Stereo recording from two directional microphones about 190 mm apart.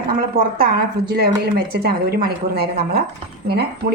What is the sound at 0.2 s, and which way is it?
A woman's voice, 50° right (ahead or behind).